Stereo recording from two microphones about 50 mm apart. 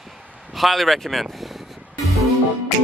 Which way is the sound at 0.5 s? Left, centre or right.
Centre.